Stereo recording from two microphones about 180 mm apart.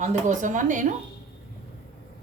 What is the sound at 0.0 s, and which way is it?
Speech, 40° right (ahead or behind).